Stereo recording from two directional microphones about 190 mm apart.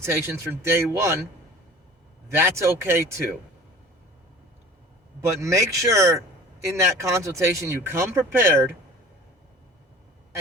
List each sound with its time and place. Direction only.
0.0 s speech: 15° right (ahead or behind)
2.3 s speech: 15° right (ahead or behind)
5.4 s speech: 15° right (ahead or behind)